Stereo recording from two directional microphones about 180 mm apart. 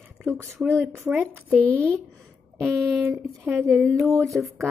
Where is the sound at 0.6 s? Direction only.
10° right (ahead or behind).